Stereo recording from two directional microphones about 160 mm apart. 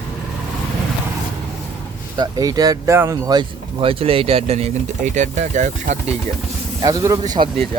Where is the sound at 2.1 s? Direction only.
25° right (ahead or behind); by 6.0 s 50° right (ahead or behind).